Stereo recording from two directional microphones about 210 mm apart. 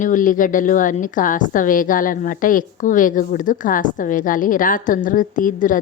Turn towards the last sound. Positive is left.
turn(degrees=40)  # may be behind; listen again after turning